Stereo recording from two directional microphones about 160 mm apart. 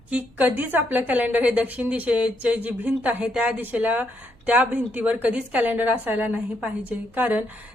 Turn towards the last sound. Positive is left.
turn(degrees=-10)  # may be behind; listen again after turning